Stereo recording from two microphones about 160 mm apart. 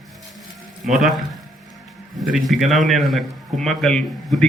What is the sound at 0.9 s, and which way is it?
Speech, centre (ahead or behind).